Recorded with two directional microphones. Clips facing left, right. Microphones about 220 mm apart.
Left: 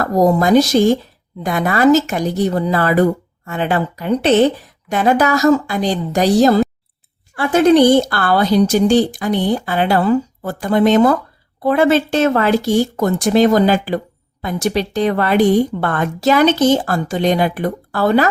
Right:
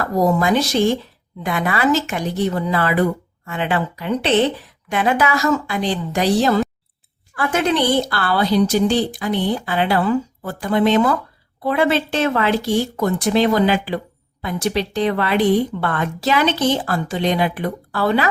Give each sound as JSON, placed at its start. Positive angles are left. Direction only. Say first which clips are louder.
{"t": 0.0, "sound": "a woman's voice", "louder": "left 4 dB", "side_deg": 40}